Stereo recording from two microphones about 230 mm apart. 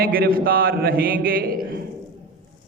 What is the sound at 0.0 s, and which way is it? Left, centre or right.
Mantra, right.